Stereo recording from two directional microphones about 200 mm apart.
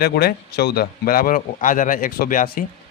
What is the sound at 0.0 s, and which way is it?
A man's voice, 50° left (ahead or behind).